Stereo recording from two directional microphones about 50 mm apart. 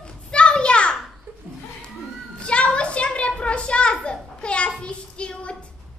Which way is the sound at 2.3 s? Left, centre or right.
Left.